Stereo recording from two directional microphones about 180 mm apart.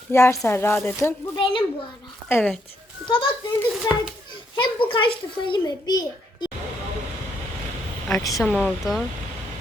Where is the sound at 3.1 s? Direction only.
30° left (ahead or behind).